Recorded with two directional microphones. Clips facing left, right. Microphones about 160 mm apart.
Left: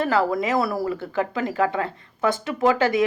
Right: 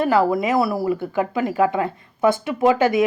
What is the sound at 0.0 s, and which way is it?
Speech, 15° right (ahead or behind).